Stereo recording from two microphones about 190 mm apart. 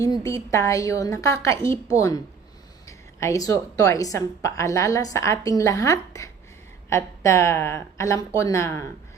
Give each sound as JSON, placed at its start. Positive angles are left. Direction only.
{"t": 0.0, "sound": "a woman's voice", "side_deg": 20}